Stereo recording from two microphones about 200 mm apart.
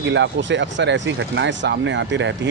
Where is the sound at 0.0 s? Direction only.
65° right (ahead or behind).